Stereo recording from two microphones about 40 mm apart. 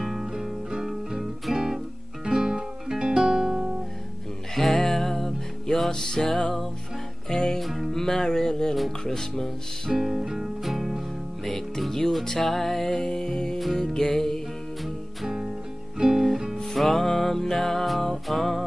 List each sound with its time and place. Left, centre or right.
0.0 s music: centre
2.2 s music: centre
4.6 s music: centre
7.6 s music: centre
7.9 s music: centre
9.9 s music: centre
11.4 s music: centre
15.2 s music: centre
16.5 s music: centre